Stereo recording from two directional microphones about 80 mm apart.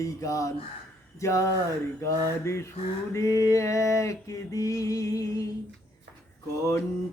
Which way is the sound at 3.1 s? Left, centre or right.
Left.